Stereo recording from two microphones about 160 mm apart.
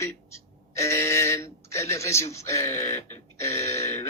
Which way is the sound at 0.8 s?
15° left (ahead or behind).